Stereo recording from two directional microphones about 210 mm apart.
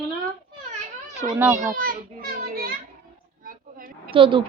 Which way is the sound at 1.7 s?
40° right (ahead or behind).